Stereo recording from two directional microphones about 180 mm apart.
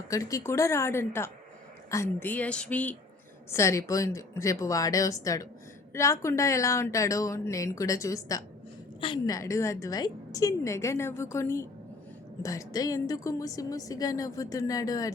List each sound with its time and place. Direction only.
0.1 s a woman's voice: 15° left (ahead or behind)